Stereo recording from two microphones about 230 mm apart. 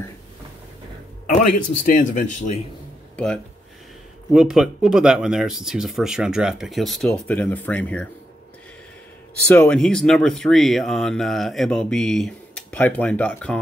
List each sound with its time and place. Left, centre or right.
1.8 s speech: left
4.3 s speech: centre
9.5 s speech: centre